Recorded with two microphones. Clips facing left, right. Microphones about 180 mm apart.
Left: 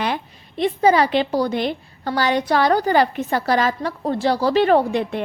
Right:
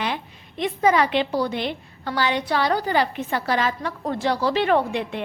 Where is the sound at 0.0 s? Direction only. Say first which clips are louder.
Left 4 dB; 40° left (ahead or behind).